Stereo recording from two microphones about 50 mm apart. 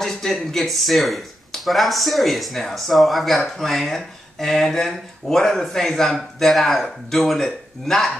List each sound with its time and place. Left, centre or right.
0.0 s speech: centre